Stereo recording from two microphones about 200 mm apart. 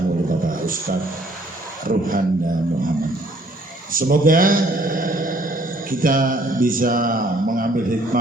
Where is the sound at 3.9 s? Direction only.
45° right (ahead or behind).